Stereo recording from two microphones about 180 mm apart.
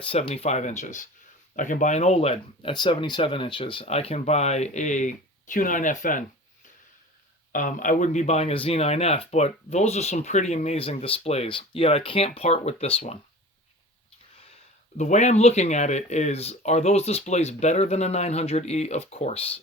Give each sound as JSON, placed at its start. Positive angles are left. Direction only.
{"t": 0.0, "sound": "speech", "side_deg": 35}
{"t": 7.5, "sound": "speech", "side_deg": 45}
{"t": 14.9, "sound": "speech", "side_deg": 40}